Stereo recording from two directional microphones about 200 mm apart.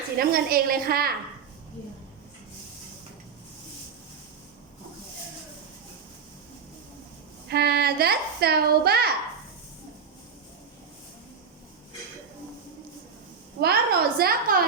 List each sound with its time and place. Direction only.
0.2 s a woman's voice: 50° right (ahead or behind)
7.4 s a woman's voice: 55° right (ahead or behind)
13.6 s a woman's voice: 50° right (ahead or behind)